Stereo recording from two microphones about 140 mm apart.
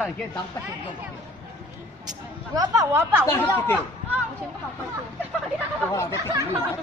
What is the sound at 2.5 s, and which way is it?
Speech, 25° right (ahead or behind).